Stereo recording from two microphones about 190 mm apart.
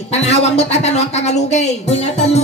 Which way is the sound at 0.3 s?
35° left (ahead or behind).